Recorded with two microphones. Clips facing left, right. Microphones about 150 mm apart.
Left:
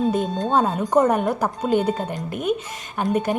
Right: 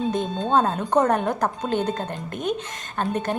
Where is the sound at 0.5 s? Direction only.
10° left (ahead or behind).